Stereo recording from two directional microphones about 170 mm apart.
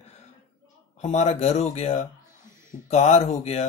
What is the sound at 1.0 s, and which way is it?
Speech, 40° left (ahead or behind).